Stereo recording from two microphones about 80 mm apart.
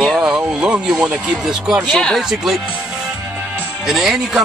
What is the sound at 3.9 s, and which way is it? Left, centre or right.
Speech, centre.